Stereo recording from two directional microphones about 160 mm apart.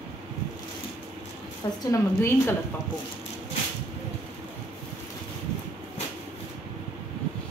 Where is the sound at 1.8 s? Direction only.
15° left (ahead or behind).